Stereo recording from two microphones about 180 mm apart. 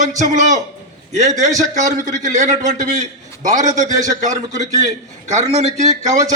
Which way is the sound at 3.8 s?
20° right (ahead or behind).